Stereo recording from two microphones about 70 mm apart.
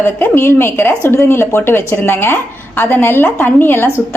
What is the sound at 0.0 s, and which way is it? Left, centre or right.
A woman's voice, left.